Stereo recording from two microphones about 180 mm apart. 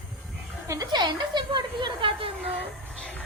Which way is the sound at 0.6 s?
15° right (ahead or behind).